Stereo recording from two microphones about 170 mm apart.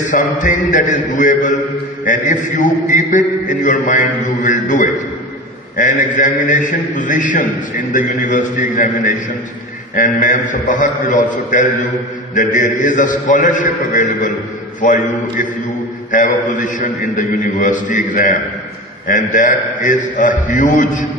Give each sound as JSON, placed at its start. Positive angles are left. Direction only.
{"t": 0.1, "sound": "a man's voice", "side_deg": 50}